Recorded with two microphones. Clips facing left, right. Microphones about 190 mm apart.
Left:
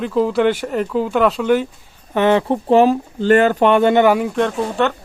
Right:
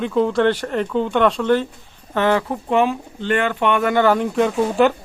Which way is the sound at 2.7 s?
35° left (ahead or behind).